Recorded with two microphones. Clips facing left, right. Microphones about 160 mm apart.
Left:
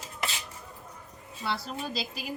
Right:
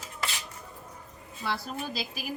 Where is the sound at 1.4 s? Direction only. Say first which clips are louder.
Even; 5° right (ahead or behind).